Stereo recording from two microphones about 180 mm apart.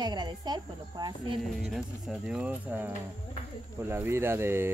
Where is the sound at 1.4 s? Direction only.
Centre (ahead or behind).